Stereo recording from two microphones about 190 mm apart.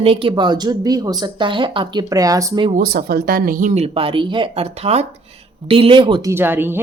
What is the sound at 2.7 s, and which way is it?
A woman's voice, 50° right (ahead or behind).